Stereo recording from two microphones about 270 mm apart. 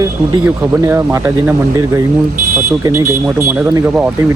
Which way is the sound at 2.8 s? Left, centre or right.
Centre.